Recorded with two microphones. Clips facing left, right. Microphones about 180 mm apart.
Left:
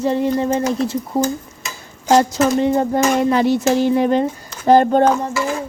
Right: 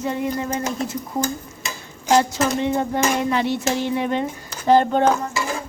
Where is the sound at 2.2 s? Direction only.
40° left (ahead or behind).